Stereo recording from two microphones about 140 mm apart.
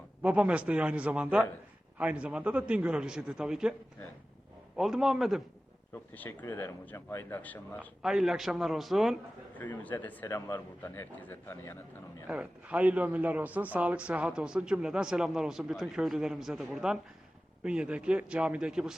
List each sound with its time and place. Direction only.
0.2 s a man's voice: 10° right (ahead or behind)
4.8 s a man's voice: 5° right (ahead or behind)
5.9 s speech: 15° left (ahead or behind)
8.0 s a man's voice: 5° right (ahead or behind)
9.6 s speech: 10° left (ahead or behind)
12.3 s a man's voice: 10° right (ahead or behind)